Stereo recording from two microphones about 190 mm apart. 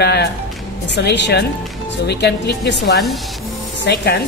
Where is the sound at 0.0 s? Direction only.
60° left (ahead or behind).